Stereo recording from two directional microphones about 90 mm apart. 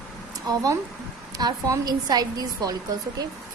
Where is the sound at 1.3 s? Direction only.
45° right (ahead or behind).